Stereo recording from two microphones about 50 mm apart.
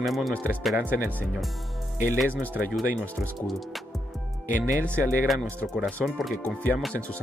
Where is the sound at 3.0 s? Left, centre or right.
Left.